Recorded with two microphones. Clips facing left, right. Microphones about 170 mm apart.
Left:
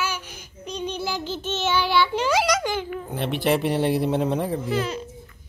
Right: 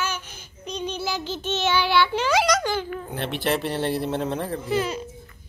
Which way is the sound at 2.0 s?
5° left (ahead or behind).